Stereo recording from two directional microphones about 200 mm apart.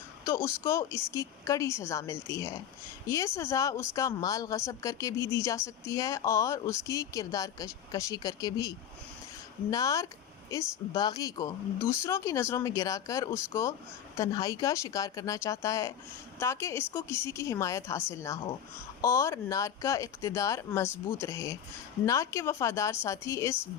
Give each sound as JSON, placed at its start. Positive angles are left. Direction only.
{"t": 0.3, "sound": "speech", "side_deg": 15}